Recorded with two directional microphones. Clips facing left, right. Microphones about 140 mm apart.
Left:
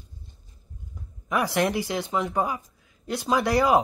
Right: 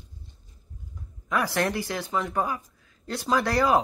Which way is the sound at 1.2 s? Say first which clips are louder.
Left 2 dB; 20° left (ahead or behind).